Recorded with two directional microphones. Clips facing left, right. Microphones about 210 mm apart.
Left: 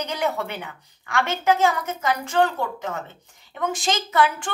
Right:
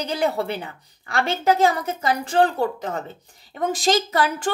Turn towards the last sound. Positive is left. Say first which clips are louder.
# even
turn(degrees=-35)  # may be behind; listen again after turning